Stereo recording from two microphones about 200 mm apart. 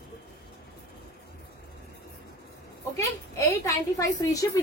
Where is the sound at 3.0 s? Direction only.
15° left (ahead or behind).